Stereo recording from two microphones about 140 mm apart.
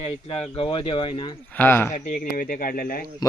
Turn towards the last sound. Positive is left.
turn(degrees=25)  # may be behind; listen again after turning